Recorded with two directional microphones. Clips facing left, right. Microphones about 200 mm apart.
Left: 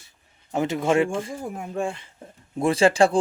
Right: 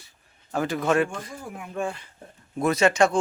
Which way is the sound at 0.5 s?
25° left (ahead or behind).